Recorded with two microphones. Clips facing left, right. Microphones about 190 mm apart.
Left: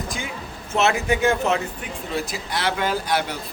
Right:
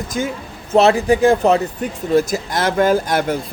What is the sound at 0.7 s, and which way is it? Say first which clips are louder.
Speech: right 8 dB; 35° right (ahead or behind).